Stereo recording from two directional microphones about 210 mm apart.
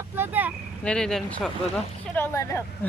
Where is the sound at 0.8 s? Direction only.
5° left (ahead or behind).